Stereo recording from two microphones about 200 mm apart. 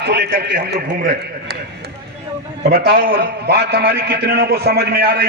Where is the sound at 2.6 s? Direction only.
50° right (ahead or behind).